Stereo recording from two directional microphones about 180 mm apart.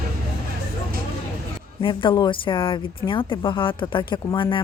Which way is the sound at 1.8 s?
25° left (ahead or behind).